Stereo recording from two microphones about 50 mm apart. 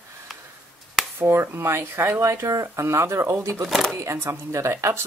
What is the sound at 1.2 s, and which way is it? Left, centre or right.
Speech, right.